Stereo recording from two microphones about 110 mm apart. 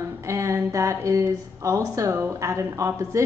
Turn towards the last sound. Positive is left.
turn(degrees=-25)  # may be behind; listen again after turning